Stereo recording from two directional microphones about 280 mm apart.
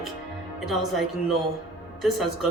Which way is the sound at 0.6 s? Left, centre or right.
Centre.